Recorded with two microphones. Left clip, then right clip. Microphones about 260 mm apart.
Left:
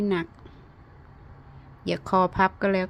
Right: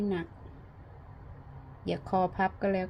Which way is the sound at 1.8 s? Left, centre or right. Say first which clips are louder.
Left 6 dB; left.